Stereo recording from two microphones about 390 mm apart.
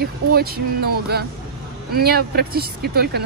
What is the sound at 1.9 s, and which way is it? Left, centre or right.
Speech, right.